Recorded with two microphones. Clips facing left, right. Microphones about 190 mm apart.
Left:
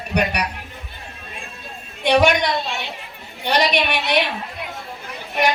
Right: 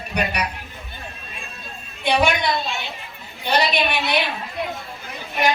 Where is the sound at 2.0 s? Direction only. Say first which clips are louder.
Left 4 dB; 75° left (ahead or behind).